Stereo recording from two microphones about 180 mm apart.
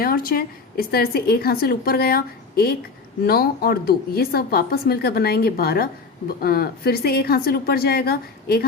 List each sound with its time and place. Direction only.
0.0 s speech: 55° left (ahead or behind)